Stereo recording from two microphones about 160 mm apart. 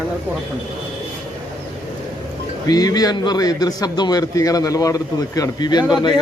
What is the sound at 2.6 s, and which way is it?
A man's voice, 25° left (ahead or behind).